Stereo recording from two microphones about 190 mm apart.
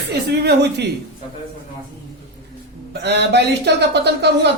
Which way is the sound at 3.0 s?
65° right (ahead or behind).